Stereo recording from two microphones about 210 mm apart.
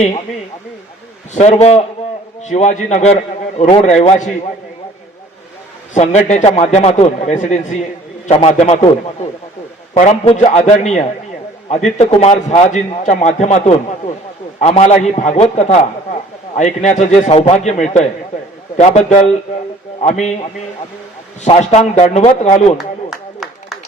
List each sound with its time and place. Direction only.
1.3 s a man's voice: 35° left (ahead or behind)
5.9 s a man's voice: 35° left (ahead or behind)
9.9 s a man's voice: 35° left (ahead or behind)
14.6 s a man's voice: 30° left (ahead or behind)
21.4 s a man's voice: 30° left (ahead or behind)
22.8 s a sound: centre (ahead or behind)